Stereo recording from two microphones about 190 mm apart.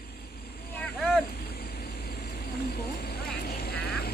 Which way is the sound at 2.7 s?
55° left (ahead or behind).